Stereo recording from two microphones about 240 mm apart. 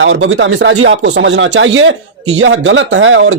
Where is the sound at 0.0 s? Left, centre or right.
Right.